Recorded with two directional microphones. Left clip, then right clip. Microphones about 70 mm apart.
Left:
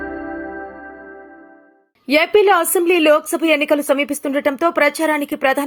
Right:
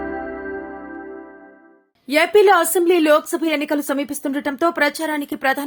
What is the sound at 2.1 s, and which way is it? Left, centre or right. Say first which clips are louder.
A woman's voice: left 1 dB; left.